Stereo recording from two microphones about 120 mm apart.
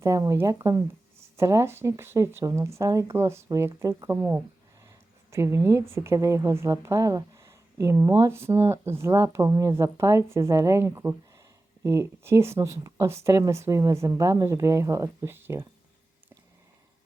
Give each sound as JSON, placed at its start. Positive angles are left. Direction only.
{"t": 0.0, "sound": "speech", "side_deg": -25}